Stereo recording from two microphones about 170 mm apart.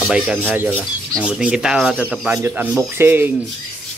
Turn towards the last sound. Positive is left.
turn(degrees=-10)  # may be behind; listen again after turning